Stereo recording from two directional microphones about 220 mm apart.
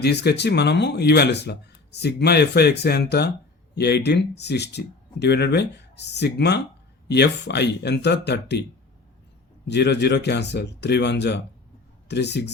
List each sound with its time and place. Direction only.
0.0 s speech: 50° left (ahead or behind)
9.6 s speech: 50° left (ahead or behind)